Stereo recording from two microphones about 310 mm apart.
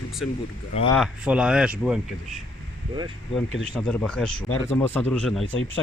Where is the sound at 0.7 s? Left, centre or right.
Centre.